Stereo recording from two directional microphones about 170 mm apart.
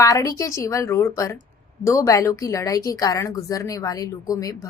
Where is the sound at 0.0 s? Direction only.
20° left (ahead or behind).